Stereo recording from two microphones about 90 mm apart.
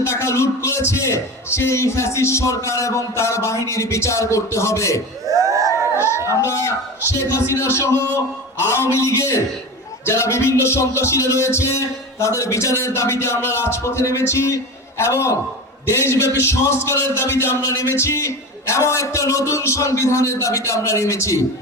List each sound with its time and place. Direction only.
0.0 s music: 35° left (ahead or behind)
5.3 s a sound: 35° right (ahead or behind)
6.0 s a sound: 30° left (ahead or behind)
6.4 s music: 30° left (ahead or behind)
15.9 s speech: 30° left (ahead or behind)
18.0 s music: 35° left (ahead or behind)